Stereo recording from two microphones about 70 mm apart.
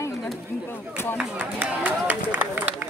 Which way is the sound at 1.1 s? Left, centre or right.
Centre.